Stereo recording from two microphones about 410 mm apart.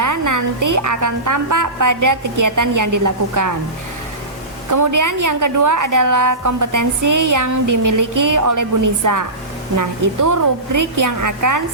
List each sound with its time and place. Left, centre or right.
0.0 s a woman's voice: right
4.7 s a woman's voice: right